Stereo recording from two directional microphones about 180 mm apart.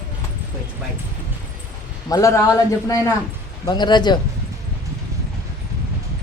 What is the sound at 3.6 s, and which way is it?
Speech, 25° left (ahead or behind).